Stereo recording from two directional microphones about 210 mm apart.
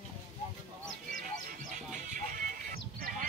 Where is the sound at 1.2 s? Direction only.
40° right (ahead or behind).